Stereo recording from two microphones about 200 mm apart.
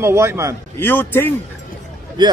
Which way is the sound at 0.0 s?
10° right (ahead or behind).